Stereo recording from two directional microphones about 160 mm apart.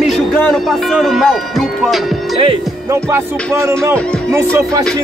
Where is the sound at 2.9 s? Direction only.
15° right (ahead or behind).